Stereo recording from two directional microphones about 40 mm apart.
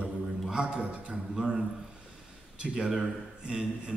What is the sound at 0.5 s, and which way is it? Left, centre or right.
Speech, right.